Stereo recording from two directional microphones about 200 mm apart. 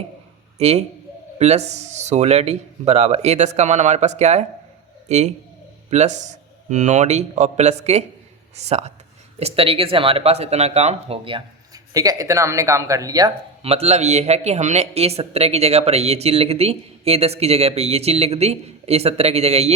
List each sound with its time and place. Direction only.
0.6 s speech: 30° right (ahead or behind)
9.4 s speech: 30° right (ahead or behind)
11.9 s speech: 15° right (ahead or behind)
13.6 s speech: 30° right (ahead or behind)